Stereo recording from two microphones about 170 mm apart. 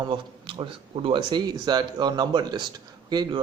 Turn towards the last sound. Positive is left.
turn(degrees=-25)  # may be behind; listen again after turning